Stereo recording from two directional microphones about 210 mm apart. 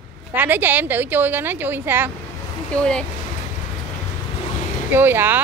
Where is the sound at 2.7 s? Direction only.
5° left (ahead or behind).